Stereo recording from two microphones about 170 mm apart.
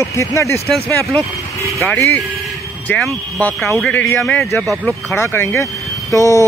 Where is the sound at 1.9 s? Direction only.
15° left (ahead or behind).